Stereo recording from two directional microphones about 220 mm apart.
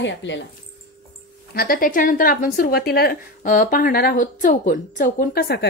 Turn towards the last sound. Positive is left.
turn(degrees=50)  # may be behind; listen again after turning